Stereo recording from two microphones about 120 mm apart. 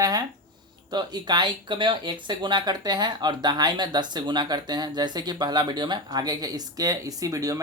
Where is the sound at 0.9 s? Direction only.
35° right (ahead or behind).